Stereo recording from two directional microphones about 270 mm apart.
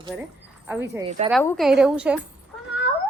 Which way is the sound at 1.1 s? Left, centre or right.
Right.